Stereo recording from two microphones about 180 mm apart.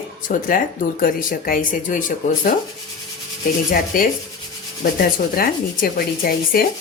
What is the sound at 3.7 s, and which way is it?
Sanding, 50° left (ahead or behind).